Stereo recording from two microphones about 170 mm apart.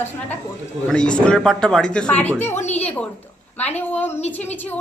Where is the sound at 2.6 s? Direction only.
40° left (ahead or behind).